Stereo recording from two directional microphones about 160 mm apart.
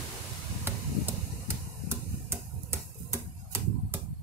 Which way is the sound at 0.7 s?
15° right (ahead or behind).